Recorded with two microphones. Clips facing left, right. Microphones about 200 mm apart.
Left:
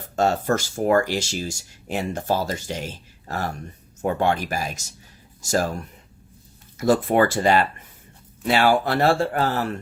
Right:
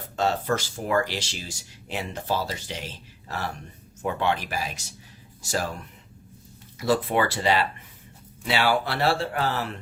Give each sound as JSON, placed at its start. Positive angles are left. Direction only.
{"t": 0.2, "sound": "speech", "side_deg": 45}